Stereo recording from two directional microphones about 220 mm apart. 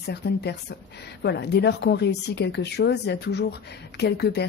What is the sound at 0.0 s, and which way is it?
Speech, 50° left (ahead or behind).